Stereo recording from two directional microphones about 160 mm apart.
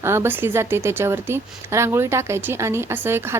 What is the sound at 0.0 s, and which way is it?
A woman's voice, 15° right (ahead or behind).